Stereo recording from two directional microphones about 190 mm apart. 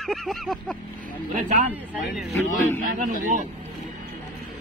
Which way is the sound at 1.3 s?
40° right (ahead or behind).